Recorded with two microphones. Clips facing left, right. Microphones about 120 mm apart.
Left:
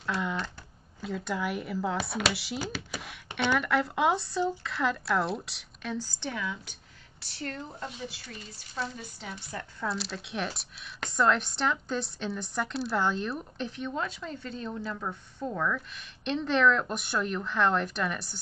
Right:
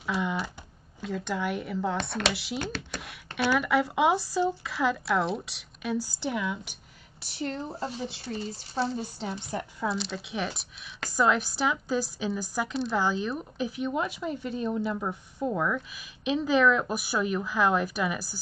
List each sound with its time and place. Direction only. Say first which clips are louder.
0.0 s typing: right 2 dB; 5° right (ahead or behind)
1.0 s speech: right 1 dB; centre (ahead or behind); by 7.5 s 15° right (ahead or behind)
7.5 s speech: right 6 dB; 30° right (ahead or behind)
9.8 s speech: right 1 dB; centre (ahead or behind)